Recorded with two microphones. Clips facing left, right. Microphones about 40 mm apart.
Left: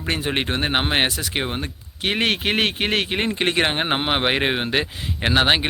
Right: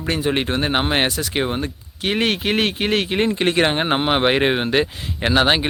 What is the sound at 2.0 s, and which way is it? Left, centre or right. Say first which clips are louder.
Speech: right 1 dB; left.